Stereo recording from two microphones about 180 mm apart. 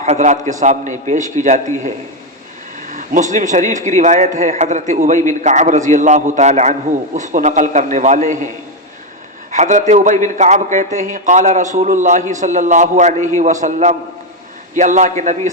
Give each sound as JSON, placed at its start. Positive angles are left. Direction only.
{"t": 0.0, "sound": "a man's voice", "side_deg": -40}
{"t": 2.9, "sound": "a man's voice", "side_deg": -45}
{"t": 9.5, "sound": "a man's voice", "side_deg": -40}